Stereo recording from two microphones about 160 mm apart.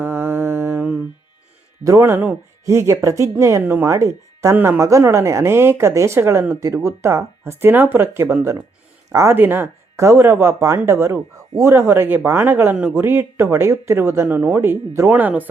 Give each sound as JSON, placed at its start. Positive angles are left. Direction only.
{"t": 0.0, "sound": "mantra", "side_deg": -15}
{"t": 1.8, "sound": "speech", "side_deg": -20}